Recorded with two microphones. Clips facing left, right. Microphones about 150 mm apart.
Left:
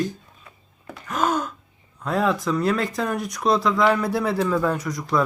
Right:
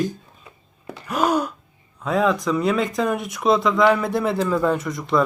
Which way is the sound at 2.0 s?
Centre (ahead or behind).